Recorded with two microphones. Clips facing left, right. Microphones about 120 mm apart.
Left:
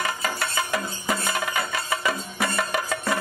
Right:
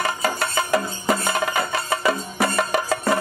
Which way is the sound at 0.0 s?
35° right (ahead or behind).